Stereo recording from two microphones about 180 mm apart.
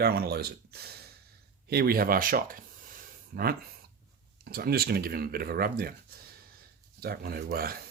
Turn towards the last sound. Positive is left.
turn(degrees=-55)  # may be behind; listen again after turning